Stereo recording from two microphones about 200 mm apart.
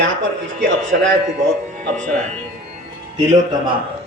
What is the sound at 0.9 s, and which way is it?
Speech, 50° right (ahead or behind).